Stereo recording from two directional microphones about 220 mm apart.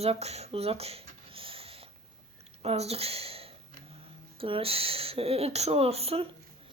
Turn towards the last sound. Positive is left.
turn(degrees=-25)  # may be behind; listen again after turning